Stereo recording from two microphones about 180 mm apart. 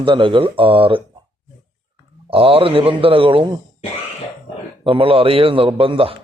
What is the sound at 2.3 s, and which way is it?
A man's voice, 30° right (ahead or behind).